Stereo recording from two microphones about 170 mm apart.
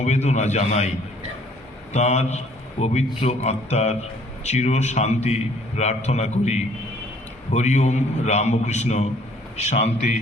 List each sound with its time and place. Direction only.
0.0 s a man's voice: 40° left (ahead or behind)
1.9 s a man's voice: 40° left (ahead or behind)